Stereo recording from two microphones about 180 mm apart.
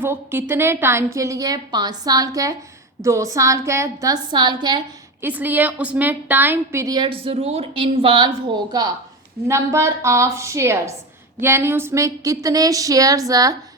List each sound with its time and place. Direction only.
0.0 s a woman's voice: 10° right (ahead or behind)
5.2 s a woman's voice: 10° right (ahead or behind)